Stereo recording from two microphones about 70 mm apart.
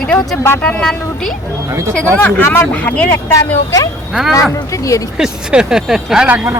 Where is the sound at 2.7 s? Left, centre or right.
Centre.